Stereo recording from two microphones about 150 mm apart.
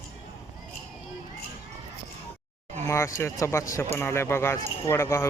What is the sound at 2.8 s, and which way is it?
Speech, 20° left (ahead or behind).